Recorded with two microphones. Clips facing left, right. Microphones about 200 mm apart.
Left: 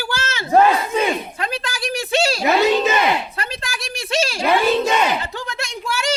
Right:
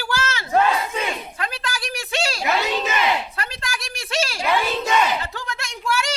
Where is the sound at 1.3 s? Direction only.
25° left (ahead or behind).